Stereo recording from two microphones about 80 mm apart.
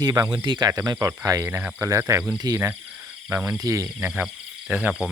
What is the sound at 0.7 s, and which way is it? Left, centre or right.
Speech, right.